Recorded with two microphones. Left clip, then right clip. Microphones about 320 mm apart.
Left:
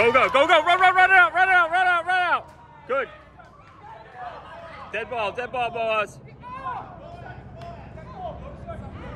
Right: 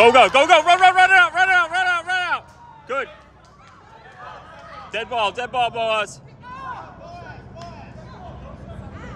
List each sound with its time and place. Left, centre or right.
0.0 s a sound: centre
4.9 s speech: centre
6.4 s vehicle: left